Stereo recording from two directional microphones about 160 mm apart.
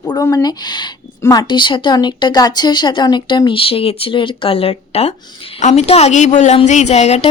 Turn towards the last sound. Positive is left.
turn(degrees=40)  # may be behind; listen again after turning